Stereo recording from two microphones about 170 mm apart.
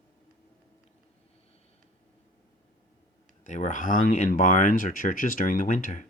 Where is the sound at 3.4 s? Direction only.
45° left (ahead or behind).